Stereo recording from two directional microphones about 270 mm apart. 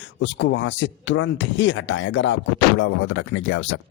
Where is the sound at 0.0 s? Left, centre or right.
Left.